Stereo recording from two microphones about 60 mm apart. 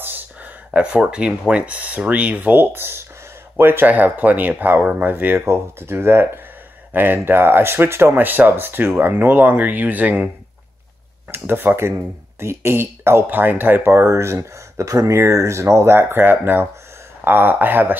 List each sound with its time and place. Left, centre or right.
0.0 s a sound: right
0.7 s speech: centre
2.5 s speech: right
3.8 s speech: right
11.3 s speech: right
14.0 s speech: right
15.1 s speech: right